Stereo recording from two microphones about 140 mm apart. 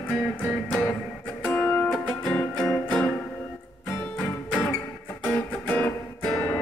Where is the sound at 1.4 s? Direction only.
15° left (ahead or behind).